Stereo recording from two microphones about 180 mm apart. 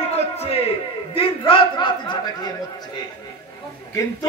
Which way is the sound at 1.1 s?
30° left (ahead or behind).